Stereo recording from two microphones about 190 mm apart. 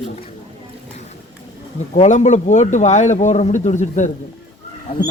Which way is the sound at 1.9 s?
40° left (ahead or behind).